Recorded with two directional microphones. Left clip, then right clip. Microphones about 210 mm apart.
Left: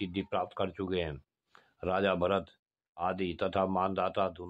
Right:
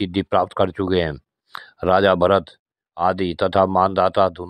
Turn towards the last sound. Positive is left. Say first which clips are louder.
# right 14 dB
turn(degrees=-40)  # may be behind; listen again after turning